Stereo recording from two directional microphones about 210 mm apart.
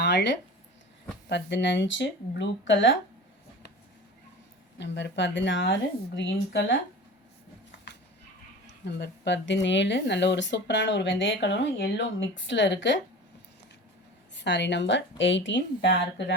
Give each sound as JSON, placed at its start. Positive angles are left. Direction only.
{"t": 0.0, "sound": "speech", "side_deg": 55}
{"t": 4.8, "sound": "speech", "side_deg": 55}
{"t": 8.8, "sound": "speech", "side_deg": 55}
{"t": 14.3, "sound": "speech", "side_deg": 55}